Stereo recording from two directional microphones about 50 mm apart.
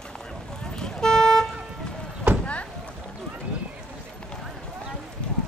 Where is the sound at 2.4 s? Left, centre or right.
Left.